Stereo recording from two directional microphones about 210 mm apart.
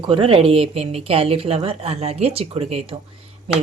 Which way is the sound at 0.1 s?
25° right (ahead or behind).